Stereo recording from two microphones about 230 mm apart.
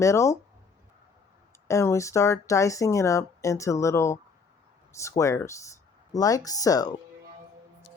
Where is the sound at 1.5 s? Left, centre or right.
Centre.